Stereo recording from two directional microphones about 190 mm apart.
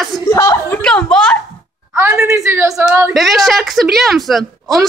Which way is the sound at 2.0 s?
15° right (ahead or behind).